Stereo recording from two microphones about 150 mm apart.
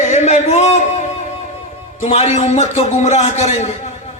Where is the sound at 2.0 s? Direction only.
50° left (ahead or behind).